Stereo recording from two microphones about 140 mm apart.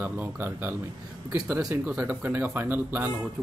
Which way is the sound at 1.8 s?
10° right (ahead or behind).